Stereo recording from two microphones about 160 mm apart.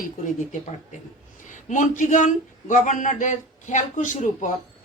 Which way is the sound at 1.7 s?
55° left (ahead or behind).